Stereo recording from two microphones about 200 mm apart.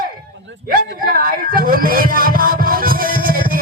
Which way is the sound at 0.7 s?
45° right (ahead or behind).